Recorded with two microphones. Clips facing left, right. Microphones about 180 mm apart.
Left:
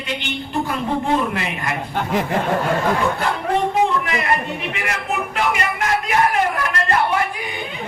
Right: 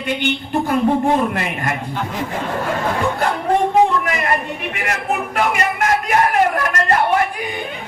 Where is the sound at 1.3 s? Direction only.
50° right (ahead or behind).